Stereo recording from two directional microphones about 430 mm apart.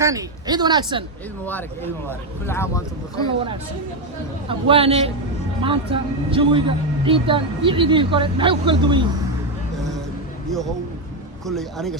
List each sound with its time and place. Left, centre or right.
0.0 s a man's voice: centre
1.5 s speech: centre
4.4 s a man's voice: centre
11.4 s speech: centre